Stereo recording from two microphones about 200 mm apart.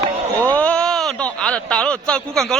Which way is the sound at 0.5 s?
5° left (ahead or behind).